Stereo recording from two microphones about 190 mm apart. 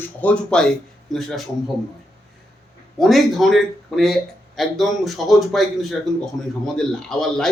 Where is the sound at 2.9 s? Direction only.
Centre (ahead or behind).